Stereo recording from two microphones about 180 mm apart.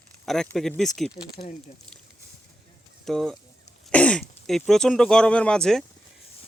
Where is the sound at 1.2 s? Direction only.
15° left (ahead or behind).